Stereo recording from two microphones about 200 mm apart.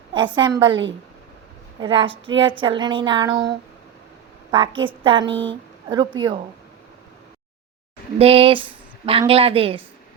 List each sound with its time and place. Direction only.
0.1 s speech: 25° right (ahead or behind)
0.7 s a woman's voice: 65° right (ahead or behind)
1.8 s speech: 25° right (ahead or behind)
4.5 s speech: 25° right (ahead or behind)
8.2 s speech: 30° right (ahead or behind)